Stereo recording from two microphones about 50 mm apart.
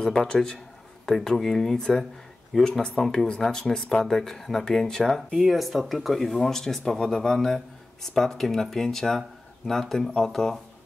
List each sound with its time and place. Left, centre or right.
0.0 s speech: centre
5.4 s speech: centre